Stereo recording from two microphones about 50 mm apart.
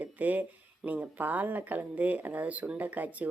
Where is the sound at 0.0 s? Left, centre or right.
Right.